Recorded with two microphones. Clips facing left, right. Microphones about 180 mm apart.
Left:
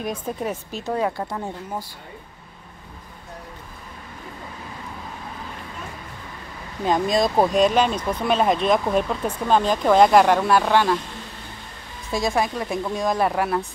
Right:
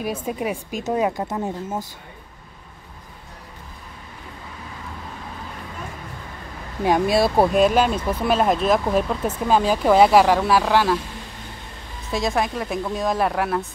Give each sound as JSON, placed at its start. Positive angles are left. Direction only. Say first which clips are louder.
{"t": 0.0, "sound": "speech", "louder": "right 2 dB", "side_deg": -5}
{"t": 6.8, "sound": "speech", "louder": "right 2 dB", "side_deg": -10}
{"t": 12.1, "sound": "speech", "louder": "even", "side_deg": 0}